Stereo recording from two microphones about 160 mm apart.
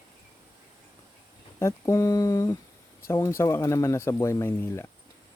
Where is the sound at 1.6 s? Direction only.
15° left (ahead or behind).